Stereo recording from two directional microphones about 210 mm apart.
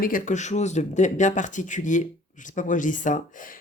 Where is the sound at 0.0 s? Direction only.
40° left (ahead or behind).